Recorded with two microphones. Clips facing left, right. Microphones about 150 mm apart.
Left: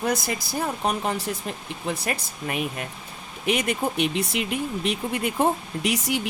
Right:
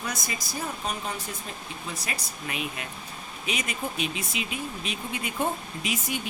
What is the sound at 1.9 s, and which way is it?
Speech, 55° left (ahead or behind).